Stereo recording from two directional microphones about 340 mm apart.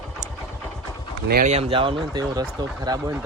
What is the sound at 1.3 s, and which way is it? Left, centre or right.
Speech, right.